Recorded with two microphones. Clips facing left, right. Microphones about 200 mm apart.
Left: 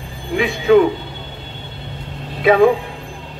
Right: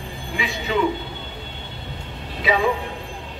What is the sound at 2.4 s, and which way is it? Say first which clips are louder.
Speech: left 10 dB; 55° left (ahead or behind).